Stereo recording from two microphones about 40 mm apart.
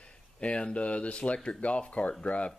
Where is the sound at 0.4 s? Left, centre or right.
Left.